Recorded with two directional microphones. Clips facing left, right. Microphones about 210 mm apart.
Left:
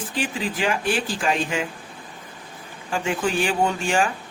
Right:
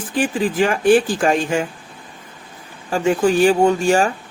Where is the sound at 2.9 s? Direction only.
40° right (ahead or behind).